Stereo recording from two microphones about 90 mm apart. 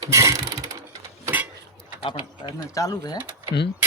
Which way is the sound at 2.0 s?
65° left (ahead or behind).